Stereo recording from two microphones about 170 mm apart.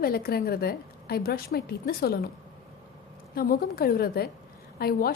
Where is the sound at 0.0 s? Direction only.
65° left (ahead or behind).